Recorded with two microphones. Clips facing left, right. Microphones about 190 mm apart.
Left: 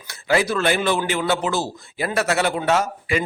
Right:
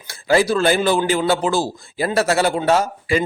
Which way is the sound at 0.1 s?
35° right (ahead or behind).